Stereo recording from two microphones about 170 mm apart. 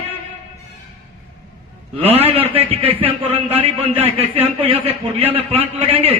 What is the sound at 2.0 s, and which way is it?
A man's voice, 35° right (ahead or behind).